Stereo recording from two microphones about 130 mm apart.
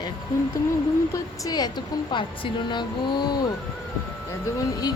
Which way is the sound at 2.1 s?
35° left (ahead or behind).